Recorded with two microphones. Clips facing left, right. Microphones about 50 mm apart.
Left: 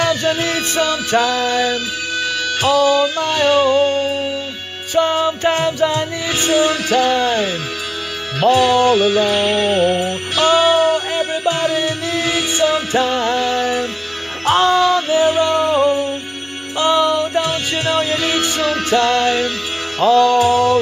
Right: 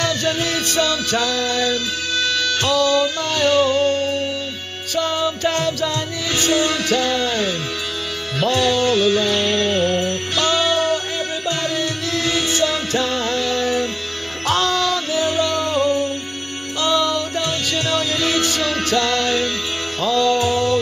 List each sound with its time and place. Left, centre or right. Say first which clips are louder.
0.0 s music: left 4 dB; centre